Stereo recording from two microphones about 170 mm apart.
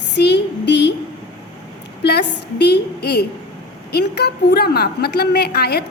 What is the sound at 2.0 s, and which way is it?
A woman's voice, 75° left (ahead or behind).